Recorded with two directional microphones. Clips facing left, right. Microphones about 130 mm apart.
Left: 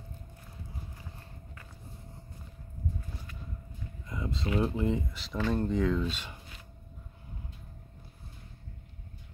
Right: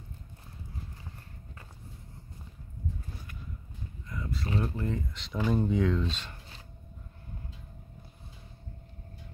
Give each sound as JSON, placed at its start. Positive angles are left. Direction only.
{"t": 4.1, "sound": "a sound", "side_deg": 20}
{"t": 4.6, "sound": "speech", "side_deg": 20}
{"t": 5.1, "sound": "speech", "side_deg": 5}